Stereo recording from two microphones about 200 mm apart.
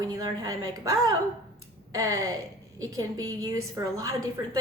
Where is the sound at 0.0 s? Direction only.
20° right (ahead or behind).